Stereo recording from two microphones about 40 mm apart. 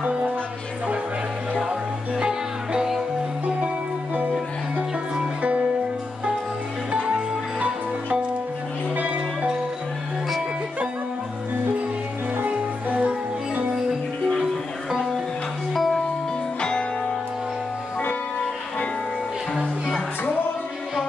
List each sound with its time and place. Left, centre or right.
0.0 s music: right
1.6 s music: centre
3.4 s music: right
7.6 s music: right
8.9 s music: right
12.4 s music: right
14.4 s music: centre